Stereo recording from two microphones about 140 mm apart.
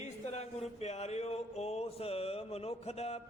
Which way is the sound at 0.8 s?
50° left (ahead or behind).